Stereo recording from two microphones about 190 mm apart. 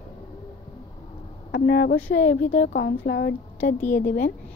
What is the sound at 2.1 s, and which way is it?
A woman's voice, 75° left (ahead or behind).